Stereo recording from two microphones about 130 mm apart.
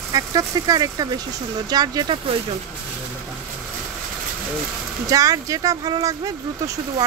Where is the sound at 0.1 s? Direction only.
30° right (ahead or behind).